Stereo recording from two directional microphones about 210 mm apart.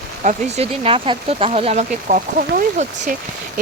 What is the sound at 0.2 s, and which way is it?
Speech, 35° right (ahead or behind).